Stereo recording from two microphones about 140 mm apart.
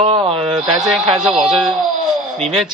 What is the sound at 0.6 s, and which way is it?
Speech, 5° right (ahead or behind).